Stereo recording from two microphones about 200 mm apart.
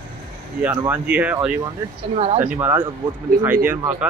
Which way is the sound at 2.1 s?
30° right (ahead or behind).